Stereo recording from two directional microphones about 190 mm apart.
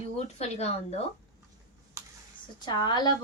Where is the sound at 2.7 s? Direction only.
25° left (ahead or behind).